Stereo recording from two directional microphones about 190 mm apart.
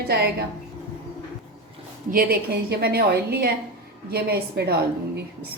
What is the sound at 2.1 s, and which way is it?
A woman's voice, 50° right (ahead or behind).